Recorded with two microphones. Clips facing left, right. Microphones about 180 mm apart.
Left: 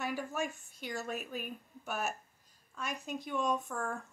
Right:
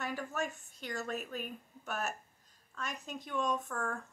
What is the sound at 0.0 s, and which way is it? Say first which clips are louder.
Speech: left 1 dB; 5° left (ahead or behind).